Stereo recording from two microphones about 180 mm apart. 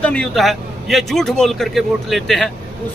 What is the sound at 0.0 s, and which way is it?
A man's voice, 5° left (ahead or behind).